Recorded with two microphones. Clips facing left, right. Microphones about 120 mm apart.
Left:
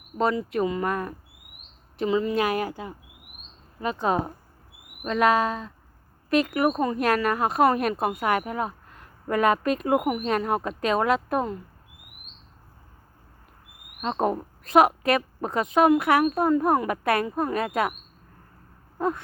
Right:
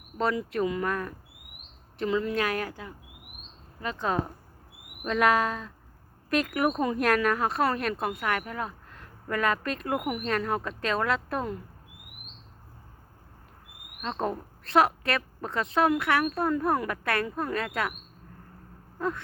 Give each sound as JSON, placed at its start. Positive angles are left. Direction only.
{"t": 0.5, "sound": "a woman's voice", "side_deg": 5}
{"t": 4.1, "sound": "a woman's voice", "side_deg": 15}
{"t": 5.0, "sound": "a woman's voice", "side_deg": 0}
{"t": 14.0, "sound": "a woman's voice", "side_deg": 20}
{"t": 18.9, "sound": "wheeze", "side_deg": 15}